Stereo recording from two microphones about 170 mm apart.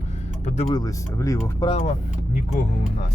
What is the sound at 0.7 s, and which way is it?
Speech, 20° left (ahead or behind).